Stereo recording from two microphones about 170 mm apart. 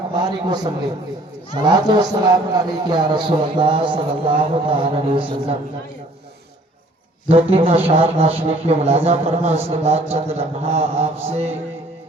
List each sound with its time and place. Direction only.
0.2 s a man's voice: 25° right (ahead or behind)
7.3 s a man's voice: 35° right (ahead or behind)